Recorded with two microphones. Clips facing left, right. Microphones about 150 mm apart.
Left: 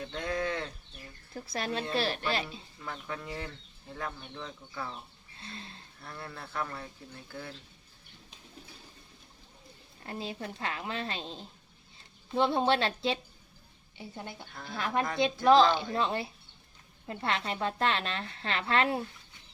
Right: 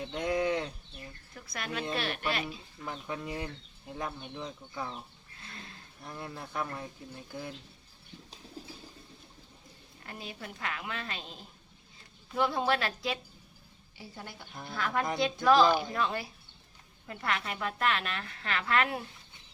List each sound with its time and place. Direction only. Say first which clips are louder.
0.0 s speech: right 3 dB; 15° right (ahead or behind)
1.3 s a woman's voice: left 5 dB; 30° left (ahead or behind)
2.8 s speech: right 2 dB; 20° right (ahead or behind)
5.4 s a woman's voice: left 3 dB; 30° left (ahead or behind)
6.0 s speech: right 2 dB; 15° right (ahead or behind)
8.6 s a sound: right 7 dB; 35° right (ahead or behind)
10.1 s a woman's voice: left 5 dB; 30° left (ahead or behind)